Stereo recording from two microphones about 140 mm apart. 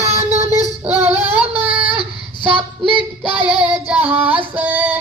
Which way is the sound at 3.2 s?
45° right (ahead or behind).